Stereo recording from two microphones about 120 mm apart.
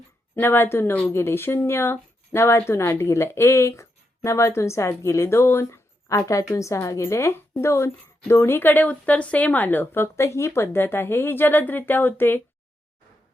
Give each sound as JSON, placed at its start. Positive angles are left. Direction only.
{"t": 0.3, "sound": "speech", "side_deg": 20}